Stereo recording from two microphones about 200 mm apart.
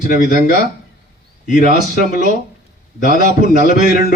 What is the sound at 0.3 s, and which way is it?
A man's voice, 45° left (ahead or behind).